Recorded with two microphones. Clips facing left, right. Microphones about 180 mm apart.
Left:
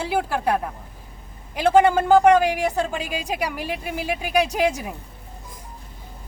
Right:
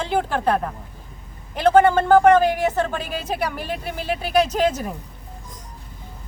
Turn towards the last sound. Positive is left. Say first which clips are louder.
# right 1 dB
turn(degrees=10)  # may be behind; listen again after turning